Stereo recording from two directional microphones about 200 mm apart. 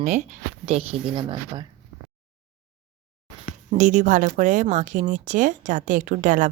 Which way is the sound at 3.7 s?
40° right (ahead or behind).